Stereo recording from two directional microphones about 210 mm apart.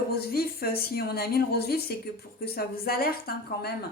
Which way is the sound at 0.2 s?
45° left (ahead or behind).